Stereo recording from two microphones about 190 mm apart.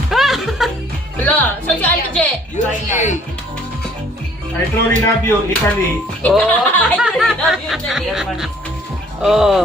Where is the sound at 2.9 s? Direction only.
40° left (ahead or behind).